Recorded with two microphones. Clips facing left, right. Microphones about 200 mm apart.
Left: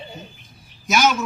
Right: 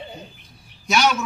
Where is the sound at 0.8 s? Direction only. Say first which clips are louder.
Left 1 dB; 5° left (ahead or behind).